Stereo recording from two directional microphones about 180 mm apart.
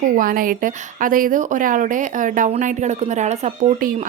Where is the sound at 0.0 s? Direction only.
50° right (ahead or behind).